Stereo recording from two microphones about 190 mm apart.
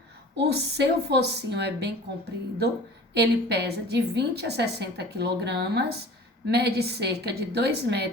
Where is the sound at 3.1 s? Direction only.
60° right (ahead or behind).